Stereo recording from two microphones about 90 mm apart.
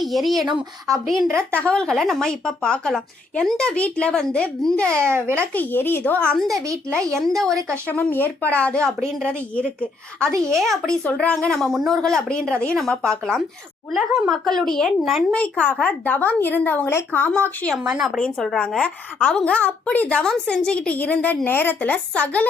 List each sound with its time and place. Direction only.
0.0 s speech: centre (ahead or behind)
1.3 s a child's voice: 30° right (ahead or behind)
1.5 s a woman's voice: 10° left (ahead or behind)
4.9 s a child's voice: 30° right (ahead or behind)
5.5 s speech: 20° left (ahead or behind)
6.5 s a child's voice: 40° right (ahead or behind)
7.2 s speech: 5° left (ahead or behind)
7.9 s a woman's voice: 20° left (ahead or behind)
10.4 s a woman's voice: 5° left (ahead or behind)
17.8 s a woman's voice: 10° right (ahead or behind)
18.2 s a woman's voice: 5° left (ahead or behind)
20.2 s a woman's voice: 5° left (ahead or behind)